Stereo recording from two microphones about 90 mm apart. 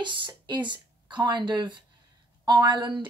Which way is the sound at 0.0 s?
60° right (ahead or behind).